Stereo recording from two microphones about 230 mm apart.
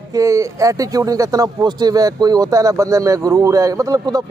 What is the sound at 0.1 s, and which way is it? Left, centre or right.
A man's voice, centre.